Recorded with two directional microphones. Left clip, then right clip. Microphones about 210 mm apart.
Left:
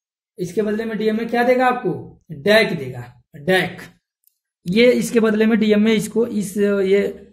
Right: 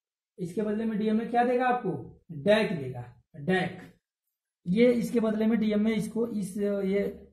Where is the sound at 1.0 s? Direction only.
45° left (ahead or behind).